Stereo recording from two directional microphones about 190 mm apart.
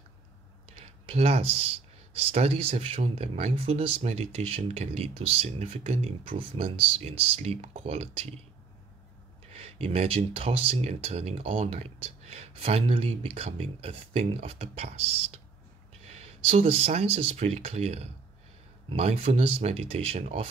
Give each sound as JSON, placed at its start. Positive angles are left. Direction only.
{"t": 0.7, "sound": "speech", "side_deg": -30}
{"t": 9.5, "sound": "speech", "side_deg": -30}